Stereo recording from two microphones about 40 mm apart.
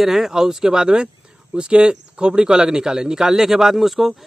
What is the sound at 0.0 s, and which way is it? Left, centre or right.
A man's voice, centre.